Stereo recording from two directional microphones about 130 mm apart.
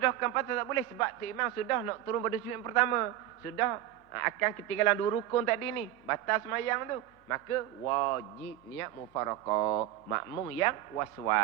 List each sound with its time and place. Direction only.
0.0 s a man's voice: 25° left (ahead or behind)